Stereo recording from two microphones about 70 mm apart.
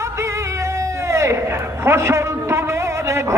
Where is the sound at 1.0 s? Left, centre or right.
Right.